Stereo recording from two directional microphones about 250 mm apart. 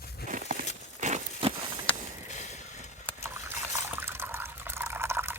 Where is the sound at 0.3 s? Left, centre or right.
Right.